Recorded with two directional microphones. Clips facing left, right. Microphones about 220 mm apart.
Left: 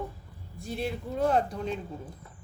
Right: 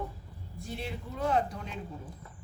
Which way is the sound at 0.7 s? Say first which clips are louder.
Left 6 dB; 40° left (ahead or behind).